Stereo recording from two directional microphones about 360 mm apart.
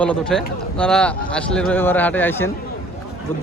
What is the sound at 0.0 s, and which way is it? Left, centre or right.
A man's voice, centre.